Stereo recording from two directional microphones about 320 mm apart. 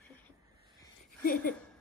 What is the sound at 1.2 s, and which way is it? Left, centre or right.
Speech, left.